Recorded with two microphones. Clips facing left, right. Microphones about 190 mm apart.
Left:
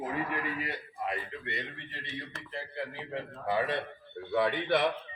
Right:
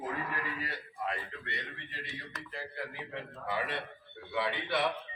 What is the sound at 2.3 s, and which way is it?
Speech, 30° left (ahead or behind).